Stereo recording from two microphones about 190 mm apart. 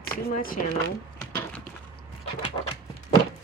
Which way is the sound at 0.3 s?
50° left (ahead or behind).